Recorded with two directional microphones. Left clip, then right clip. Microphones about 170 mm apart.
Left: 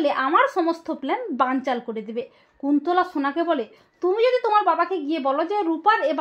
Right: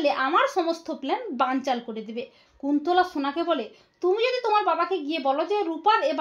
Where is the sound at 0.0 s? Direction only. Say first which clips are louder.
Left 3 dB; 30° left (ahead or behind).